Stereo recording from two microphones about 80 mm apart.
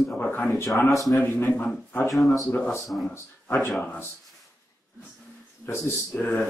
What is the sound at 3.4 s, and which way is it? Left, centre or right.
Speech, left.